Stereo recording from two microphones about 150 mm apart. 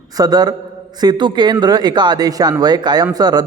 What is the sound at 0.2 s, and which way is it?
Speech, 25° right (ahead or behind).